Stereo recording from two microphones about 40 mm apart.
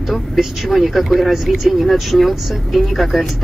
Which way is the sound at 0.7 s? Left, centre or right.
Centre.